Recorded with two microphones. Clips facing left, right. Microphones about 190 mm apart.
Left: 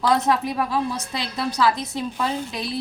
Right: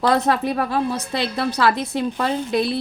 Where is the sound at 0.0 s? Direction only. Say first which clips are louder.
Right 2 dB; 65° right (ahead or behind).